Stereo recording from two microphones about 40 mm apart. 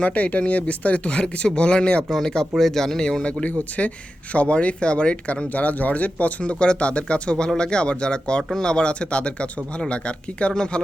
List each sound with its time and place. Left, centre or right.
0.0 s speech: left; by 3.1 s centre
3.4 s speech: left
5.5 s speech: left; by 10.8 s centre